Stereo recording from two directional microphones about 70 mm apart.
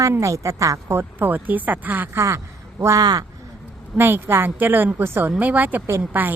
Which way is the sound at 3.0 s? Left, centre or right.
Right.